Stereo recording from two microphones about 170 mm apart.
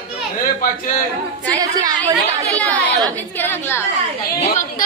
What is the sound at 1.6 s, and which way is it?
A woman's voice, 25° right (ahead or behind).